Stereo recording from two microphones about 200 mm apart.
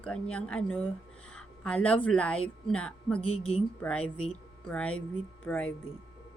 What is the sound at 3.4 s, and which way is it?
Speech, 30° left (ahead or behind).